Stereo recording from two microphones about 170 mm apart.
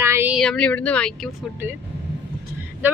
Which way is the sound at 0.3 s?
5° left (ahead or behind).